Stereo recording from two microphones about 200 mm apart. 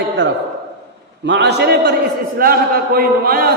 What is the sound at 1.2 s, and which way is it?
A man's voice, 60° right (ahead or behind).